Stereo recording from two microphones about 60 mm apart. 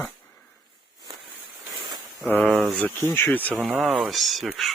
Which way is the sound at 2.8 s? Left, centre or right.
Left.